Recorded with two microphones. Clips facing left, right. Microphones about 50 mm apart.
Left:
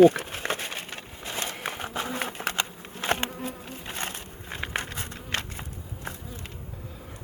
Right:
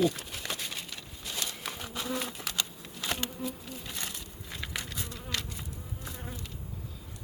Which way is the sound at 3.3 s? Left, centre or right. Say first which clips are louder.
Left 2 dB; left.